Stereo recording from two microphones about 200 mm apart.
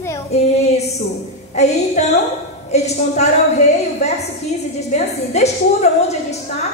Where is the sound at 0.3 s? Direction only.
30° left (ahead or behind).